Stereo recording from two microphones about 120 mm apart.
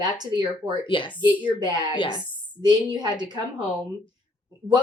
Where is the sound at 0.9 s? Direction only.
45° left (ahead or behind).